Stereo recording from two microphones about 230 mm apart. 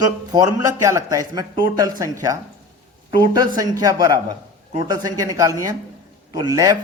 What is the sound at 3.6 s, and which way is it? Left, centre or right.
A man's voice, centre.